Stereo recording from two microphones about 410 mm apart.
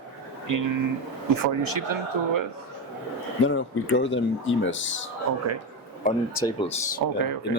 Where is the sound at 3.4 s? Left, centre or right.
Left.